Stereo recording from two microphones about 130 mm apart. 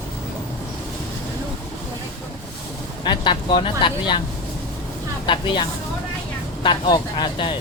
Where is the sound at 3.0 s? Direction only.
35° left (ahead or behind).